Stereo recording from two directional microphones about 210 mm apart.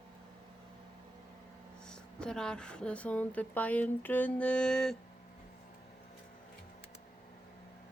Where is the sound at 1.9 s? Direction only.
5° left (ahead or behind).